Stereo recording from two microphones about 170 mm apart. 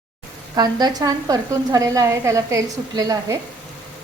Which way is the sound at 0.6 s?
25° right (ahead or behind).